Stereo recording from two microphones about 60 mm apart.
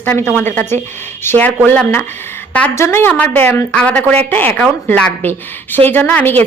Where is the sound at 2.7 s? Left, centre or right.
Left.